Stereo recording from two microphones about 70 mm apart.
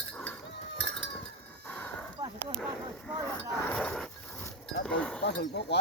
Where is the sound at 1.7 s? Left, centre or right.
Left.